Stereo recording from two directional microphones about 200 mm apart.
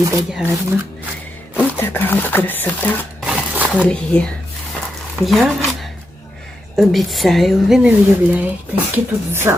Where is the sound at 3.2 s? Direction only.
5° right (ahead or behind).